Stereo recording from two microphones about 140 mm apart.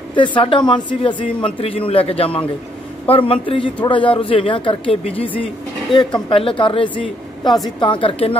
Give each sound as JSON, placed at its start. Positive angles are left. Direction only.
{"t": 0.1, "sound": "speech", "side_deg": 35}